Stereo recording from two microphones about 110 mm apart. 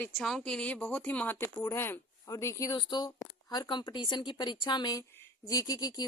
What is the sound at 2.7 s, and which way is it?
Speech, 45° left (ahead or behind).